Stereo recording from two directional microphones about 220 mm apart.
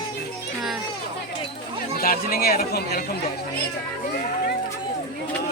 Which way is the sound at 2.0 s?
40° left (ahead or behind).